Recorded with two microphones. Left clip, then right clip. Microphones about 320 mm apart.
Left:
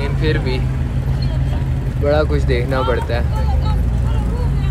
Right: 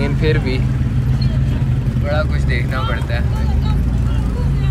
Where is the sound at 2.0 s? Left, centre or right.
Centre.